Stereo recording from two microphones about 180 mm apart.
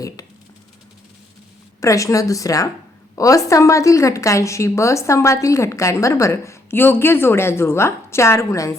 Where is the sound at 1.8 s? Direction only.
15° left (ahead or behind).